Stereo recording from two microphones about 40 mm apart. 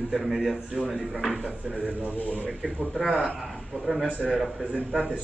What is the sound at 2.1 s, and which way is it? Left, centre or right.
Speech, left.